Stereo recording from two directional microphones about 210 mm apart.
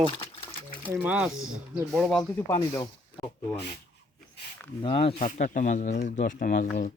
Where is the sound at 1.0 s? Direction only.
5° right (ahead or behind).